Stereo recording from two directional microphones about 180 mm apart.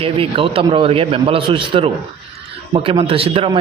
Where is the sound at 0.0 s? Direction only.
30° right (ahead or behind).